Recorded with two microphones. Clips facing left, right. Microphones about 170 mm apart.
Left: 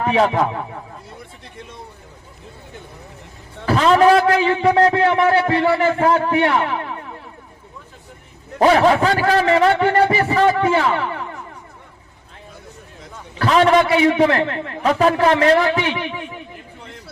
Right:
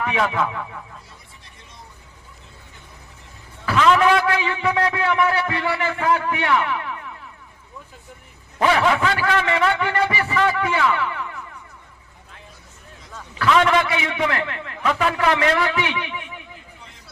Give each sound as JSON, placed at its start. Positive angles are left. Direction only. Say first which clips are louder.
{"t": 0.0, "sound": "a man's voice", "louder": "left 5 dB", "side_deg": 35}
{"t": 3.7, "sound": "a man's voice", "louder": "left 4 dB", "side_deg": 35}
{"t": 8.5, "sound": "a man's voice", "louder": "left 5 dB", "side_deg": 35}
{"t": 13.4, "sound": "a man's voice", "louder": "left 4 dB", "side_deg": 35}